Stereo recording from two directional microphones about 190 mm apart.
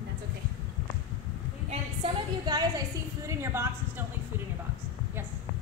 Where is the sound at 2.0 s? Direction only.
20° right (ahead or behind).